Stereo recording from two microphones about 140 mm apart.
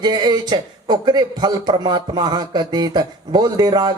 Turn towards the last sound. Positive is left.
turn(degrees=-30)  # may be behind; listen again after turning